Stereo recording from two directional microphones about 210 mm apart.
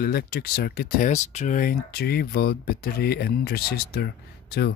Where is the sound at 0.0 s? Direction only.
45° left (ahead or behind).